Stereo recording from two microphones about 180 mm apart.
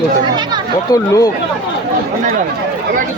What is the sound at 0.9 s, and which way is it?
Speech, 20° left (ahead or behind).